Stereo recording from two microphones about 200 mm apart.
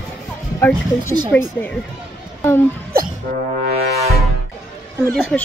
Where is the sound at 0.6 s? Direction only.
10° left (ahead or behind).